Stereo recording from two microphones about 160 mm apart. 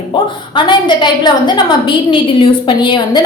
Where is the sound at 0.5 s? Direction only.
30° left (ahead or behind).